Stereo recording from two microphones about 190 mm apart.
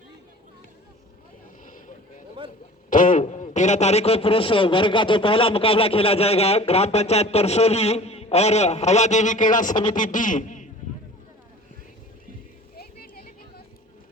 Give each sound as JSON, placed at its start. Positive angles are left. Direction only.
{"t": 1.6, "sound": "vehicle", "side_deg": 45}
{"t": 2.9, "sound": "a man's voice", "side_deg": 45}
{"t": 12.7, "sound": "a sound", "side_deg": 55}